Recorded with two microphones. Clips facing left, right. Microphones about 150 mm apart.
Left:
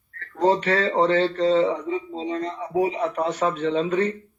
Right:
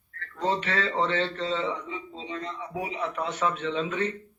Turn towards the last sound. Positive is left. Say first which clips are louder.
# left 6 dB
turn(degrees=40)  # may be behind; listen again after turning